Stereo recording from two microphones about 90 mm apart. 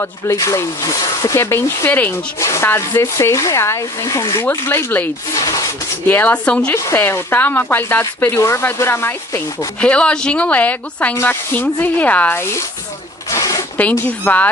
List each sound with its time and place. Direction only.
0.0 s speech: 40° left (ahead or behind)
1.9 s speech: 20° left (ahead or behind)
2.4 s speech: 30° left (ahead or behind)
5.3 s a sound: 40° left (ahead or behind)
6.0 s a woman's voice: 20° left (ahead or behind)
7.0 s speech: 25° left (ahead or behind)
9.8 s a woman's voice: 15° left (ahead or behind); by 12.6 s 30° left (ahead or behind)
13.3 s zipper: 40° left (ahead or behind)
13.7 s a woman's voice: 15° left (ahead or behind)